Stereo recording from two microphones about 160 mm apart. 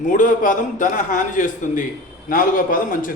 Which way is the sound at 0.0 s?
55° left (ahead or behind).